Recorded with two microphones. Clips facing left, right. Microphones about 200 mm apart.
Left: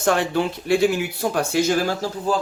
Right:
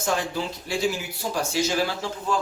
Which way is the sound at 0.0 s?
65° left (ahead or behind).